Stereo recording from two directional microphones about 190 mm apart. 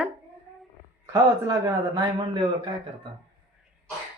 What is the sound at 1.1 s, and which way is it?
A man's voice, 20° right (ahead or behind).